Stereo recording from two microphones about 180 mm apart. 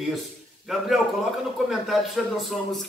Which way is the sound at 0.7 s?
Centre (ahead or behind).